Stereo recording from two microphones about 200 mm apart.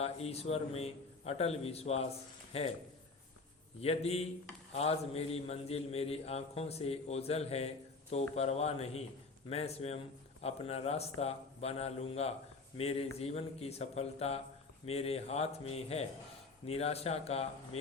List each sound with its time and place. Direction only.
0.0 s a man's voice: 30° left (ahead or behind)
3.8 s a man's voice: 30° left (ahead or behind)